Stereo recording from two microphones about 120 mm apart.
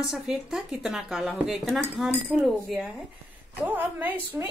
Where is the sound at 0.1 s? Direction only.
5° right (ahead or behind).